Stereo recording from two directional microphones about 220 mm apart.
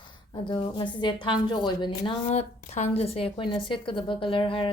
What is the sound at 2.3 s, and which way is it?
A woman's voice, 30° left (ahead or behind).